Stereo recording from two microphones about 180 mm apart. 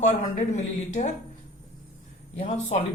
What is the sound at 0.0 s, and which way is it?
Speech, 40° left (ahead or behind).